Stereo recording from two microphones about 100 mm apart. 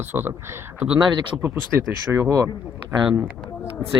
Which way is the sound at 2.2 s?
30° right (ahead or behind).